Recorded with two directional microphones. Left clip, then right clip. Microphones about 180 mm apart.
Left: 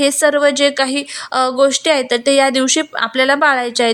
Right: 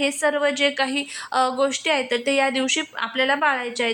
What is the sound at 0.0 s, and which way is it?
Speech, 30° left (ahead or behind).